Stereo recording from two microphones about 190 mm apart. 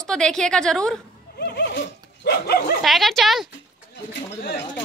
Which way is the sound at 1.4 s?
65° left (ahead or behind).